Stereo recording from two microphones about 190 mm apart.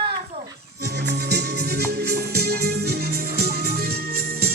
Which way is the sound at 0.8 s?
60° right (ahead or behind).